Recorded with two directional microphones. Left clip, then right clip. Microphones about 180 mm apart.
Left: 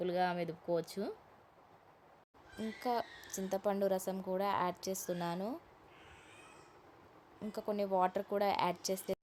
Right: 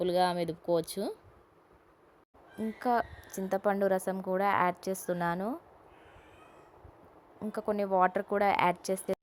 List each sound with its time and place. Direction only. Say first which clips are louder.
0.0 s speech: right 7 dB; 30° right (ahead or behind)
2.6 s speech: right 7 dB; 25° right (ahead or behind)
7.4 s speech: right 5 dB; 25° right (ahead or behind)